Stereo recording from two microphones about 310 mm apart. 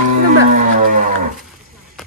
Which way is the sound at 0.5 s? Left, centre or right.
Right.